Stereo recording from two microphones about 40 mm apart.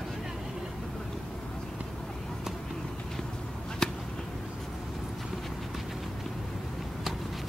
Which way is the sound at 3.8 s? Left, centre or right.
Centre.